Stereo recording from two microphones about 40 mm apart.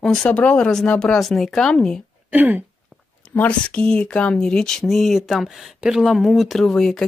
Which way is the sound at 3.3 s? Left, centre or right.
Left.